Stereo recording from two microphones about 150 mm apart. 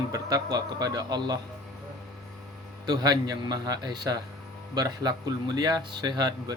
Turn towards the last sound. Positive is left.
turn(degrees=-25)  # may be behind; listen again after turning